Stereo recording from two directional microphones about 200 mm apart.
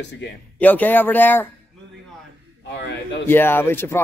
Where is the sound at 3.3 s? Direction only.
10° left (ahead or behind).